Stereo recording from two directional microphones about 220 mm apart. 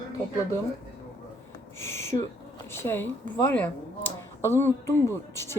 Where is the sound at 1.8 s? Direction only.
10° left (ahead or behind).